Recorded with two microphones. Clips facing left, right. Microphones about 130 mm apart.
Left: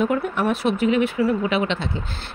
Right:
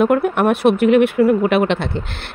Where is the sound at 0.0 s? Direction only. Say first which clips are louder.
Right 6 dB; 60° right (ahead or behind).